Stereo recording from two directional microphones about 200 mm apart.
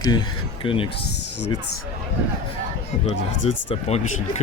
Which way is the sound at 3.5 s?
35° left (ahead or behind).